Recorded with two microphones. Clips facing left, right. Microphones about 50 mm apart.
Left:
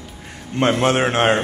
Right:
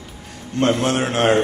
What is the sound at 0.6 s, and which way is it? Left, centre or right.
Speech, left.